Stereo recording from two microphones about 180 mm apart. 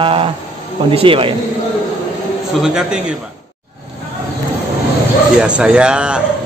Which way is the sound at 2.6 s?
5° right (ahead or behind).